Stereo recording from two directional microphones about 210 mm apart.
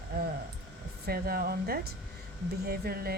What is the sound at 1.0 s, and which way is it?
Speech, 45° right (ahead or behind).